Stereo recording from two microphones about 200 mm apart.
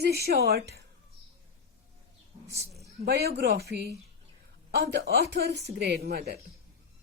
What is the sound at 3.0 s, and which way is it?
A woman's voice, 55° right (ahead or behind).